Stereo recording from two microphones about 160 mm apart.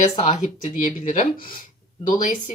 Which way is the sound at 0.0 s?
50° left (ahead or behind).